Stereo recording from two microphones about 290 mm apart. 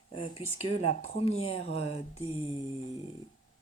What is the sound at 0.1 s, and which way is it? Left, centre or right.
Speech, centre.